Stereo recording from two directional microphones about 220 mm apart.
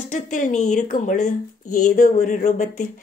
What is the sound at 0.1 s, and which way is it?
Speech, 35° left (ahead or behind).